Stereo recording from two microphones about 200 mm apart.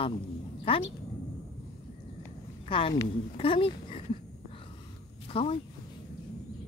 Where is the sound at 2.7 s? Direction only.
25° left (ahead or behind).